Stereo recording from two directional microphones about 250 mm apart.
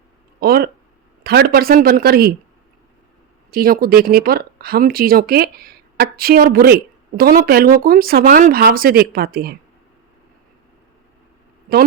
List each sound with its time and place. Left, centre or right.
0.3 s a sound: right
1.2 s speech: right
3.5 s speech: right